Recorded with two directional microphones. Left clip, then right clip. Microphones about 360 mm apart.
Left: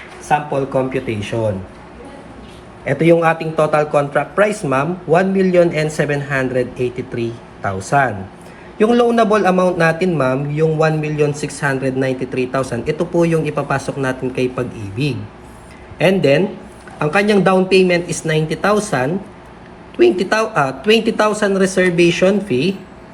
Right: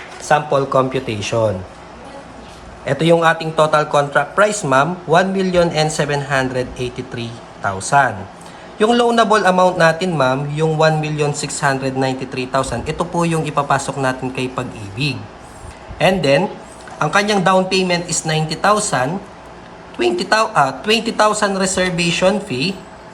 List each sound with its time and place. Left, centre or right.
0.3 s a man's voice: centre
2.8 s a man's voice: centre
6.5 s speech: right
8.8 s a man's voice: centre
20.1 s a woman's voice: centre